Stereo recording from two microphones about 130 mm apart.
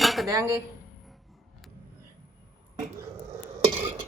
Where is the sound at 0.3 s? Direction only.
25° right (ahead or behind).